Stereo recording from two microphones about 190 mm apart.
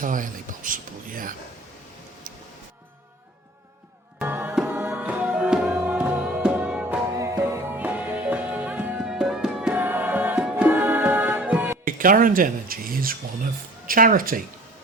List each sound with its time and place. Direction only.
0.0 s speech: 45° right (ahead or behind)
2.3 s music: 45° right (ahead or behind)
4.2 s music: 10° right (ahead or behind)
11.9 s speech: 45° right (ahead or behind)